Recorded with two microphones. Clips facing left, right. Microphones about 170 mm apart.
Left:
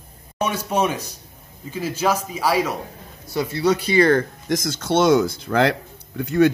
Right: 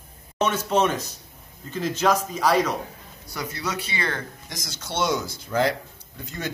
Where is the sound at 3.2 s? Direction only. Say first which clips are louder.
Left 11 dB; 25° left (ahead or behind).